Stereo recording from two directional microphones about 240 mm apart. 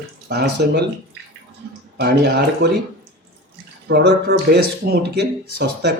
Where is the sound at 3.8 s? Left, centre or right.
Right.